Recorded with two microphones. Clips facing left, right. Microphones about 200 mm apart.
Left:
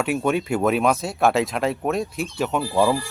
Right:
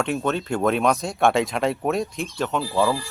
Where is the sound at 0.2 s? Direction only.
10° left (ahead or behind).